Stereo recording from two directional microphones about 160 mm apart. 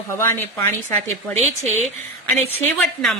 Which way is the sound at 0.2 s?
20° left (ahead or behind).